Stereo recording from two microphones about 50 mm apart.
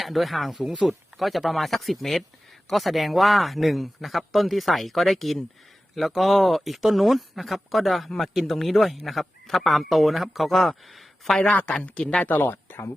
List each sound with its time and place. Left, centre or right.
0.0 s speech: centre
12.2 s speech: left
12.5 s speech: left